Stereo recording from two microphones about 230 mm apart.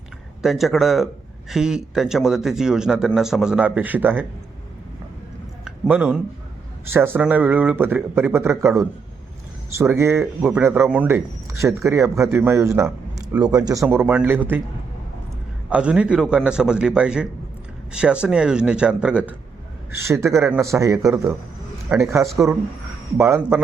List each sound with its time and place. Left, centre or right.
0.4 s speech: centre
5.6 s a man's voice: centre
9.7 s a man's voice: centre
15.7 s a man's voice: centre